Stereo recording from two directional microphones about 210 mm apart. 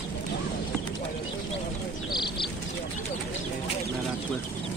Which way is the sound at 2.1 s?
20° left (ahead or behind).